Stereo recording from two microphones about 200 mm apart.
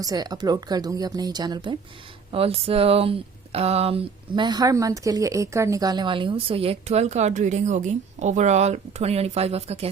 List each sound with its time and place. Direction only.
0.0 s speech: 20° right (ahead or behind)